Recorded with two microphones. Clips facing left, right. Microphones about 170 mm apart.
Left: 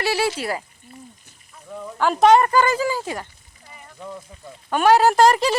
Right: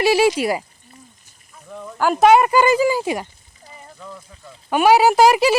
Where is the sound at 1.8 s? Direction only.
5° right (ahead or behind).